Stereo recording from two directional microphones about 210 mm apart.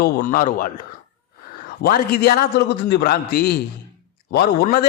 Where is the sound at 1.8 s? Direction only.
45° left (ahead or behind).